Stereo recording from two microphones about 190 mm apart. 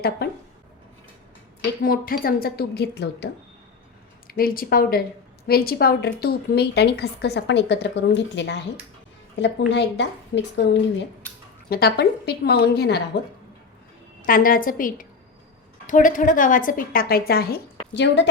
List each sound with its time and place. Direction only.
0.2 s a sound: 55° left (ahead or behind)
1.8 s a woman's voice: 50° left (ahead or behind)
4.3 s a woman's voice: 50° left (ahead or behind)
14.2 s a woman's voice: 45° left (ahead or behind)
17.9 s a woman's voice: 65° left (ahead or behind)